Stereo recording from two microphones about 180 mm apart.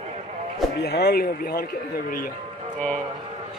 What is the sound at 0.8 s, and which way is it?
Speech, 65° left (ahead or behind).